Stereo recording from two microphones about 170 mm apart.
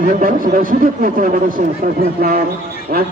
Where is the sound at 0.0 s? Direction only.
50° right (ahead or behind).